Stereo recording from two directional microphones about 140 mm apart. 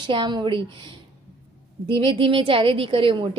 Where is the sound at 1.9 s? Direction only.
35° right (ahead or behind).